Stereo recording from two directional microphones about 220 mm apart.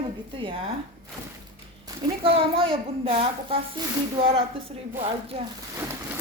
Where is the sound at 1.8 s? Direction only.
20° right (ahead or behind).